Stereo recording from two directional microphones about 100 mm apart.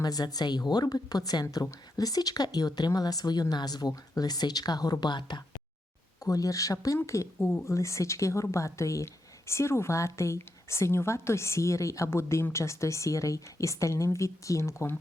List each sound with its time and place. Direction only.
0.0 s speech: 40° left (ahead or behind)
6.2 s speech: 35° left (ahead or behind)